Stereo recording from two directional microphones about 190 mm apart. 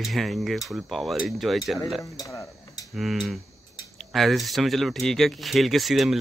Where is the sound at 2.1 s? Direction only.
20° left (ahead or behind).